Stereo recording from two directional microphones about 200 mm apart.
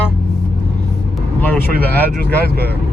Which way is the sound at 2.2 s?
50° right (ahead or behind).